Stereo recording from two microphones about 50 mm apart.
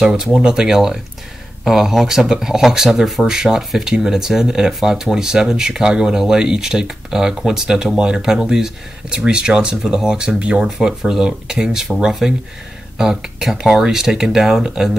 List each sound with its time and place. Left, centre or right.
0.0 s speech: centre